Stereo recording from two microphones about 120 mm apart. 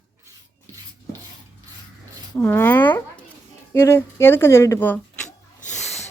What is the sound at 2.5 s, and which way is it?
A woman's voice, 15° left (ahead or behind).